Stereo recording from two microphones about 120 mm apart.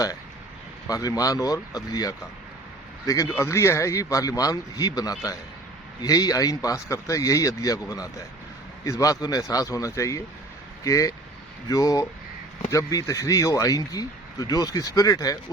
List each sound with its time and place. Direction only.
0.9 s speech: 30° left (ahead or behind)
3.2 s speech: 20° left (ahead or behind)